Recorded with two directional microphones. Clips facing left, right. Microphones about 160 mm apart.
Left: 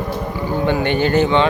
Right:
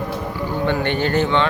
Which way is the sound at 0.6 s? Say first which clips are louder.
Left 3 dB; 10° left (ahead or behind).